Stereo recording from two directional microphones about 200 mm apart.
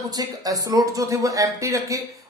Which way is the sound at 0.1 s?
20° right (ahead or behind).